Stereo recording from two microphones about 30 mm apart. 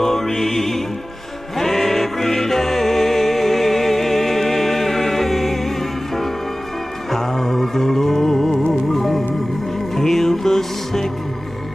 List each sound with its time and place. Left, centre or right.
0.0 s music: centre
7.1 s music: centre